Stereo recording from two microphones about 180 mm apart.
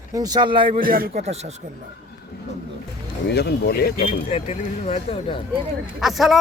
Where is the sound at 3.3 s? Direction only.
65° left (ahead or behind).